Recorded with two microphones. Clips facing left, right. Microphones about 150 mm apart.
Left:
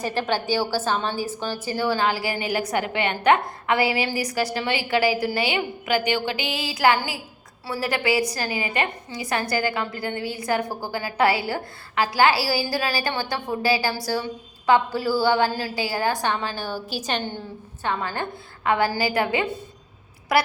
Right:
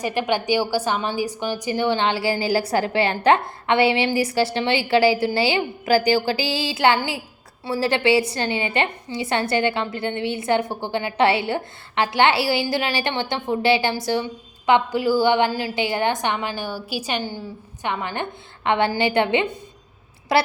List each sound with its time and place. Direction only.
0.0 s a woman's voice: 15° right (ahead or behind)
17.8 s a woman's voice: 20° right (ahead or behind)